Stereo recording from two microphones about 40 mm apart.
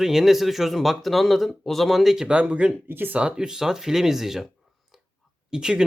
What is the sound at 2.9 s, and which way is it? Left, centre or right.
Speech, right.